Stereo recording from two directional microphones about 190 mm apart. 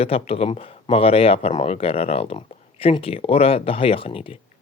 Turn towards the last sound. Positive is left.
turn(degrees=30)  # may be behind; listen again after turning